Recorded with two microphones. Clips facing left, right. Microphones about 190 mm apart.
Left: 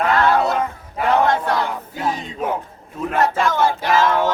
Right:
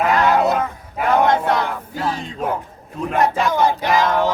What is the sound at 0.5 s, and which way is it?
Battle cry, 5° right (ahead or behind).